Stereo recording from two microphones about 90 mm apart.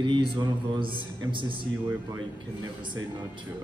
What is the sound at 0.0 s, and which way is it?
A man's voice, 65° right (ahead or behind).